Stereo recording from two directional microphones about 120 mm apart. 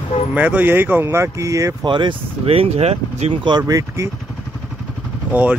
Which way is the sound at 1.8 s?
40° right (ahead or behind).